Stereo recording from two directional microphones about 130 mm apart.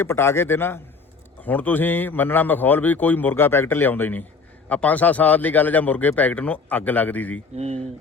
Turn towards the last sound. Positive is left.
turn(degrees=-55)  # may be behind; listen again after turning